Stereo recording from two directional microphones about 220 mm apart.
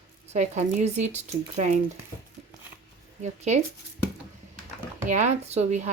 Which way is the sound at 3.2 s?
30° right (ahead or behind).